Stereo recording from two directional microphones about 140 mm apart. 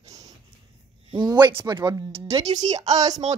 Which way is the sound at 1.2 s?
30° right (ahead or behind).